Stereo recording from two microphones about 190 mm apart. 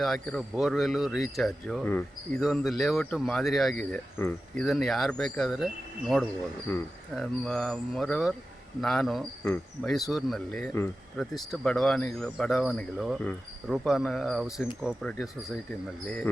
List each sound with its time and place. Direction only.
0.0 s speech: centre (ahead or behind)